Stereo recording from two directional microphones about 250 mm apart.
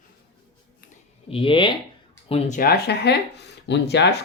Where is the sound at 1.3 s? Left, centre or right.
Left.